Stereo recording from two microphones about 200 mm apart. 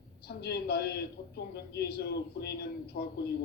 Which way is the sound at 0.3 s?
55° left (ahead or behind).